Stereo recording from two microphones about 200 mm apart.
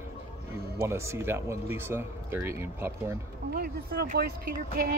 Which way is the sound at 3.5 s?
50° right (ahead or behind).